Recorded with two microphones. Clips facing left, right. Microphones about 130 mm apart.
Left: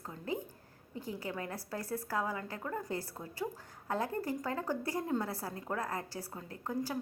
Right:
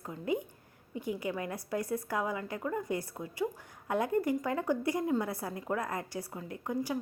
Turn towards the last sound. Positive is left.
turn(degrees=-15)  # may be behind; listen again after turning